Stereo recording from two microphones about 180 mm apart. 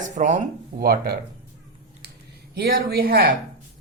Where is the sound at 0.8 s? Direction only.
55° right (ahead or behind).